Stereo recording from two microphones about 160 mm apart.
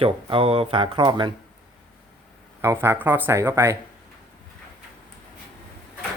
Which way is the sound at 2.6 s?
15° right (ahead or behind).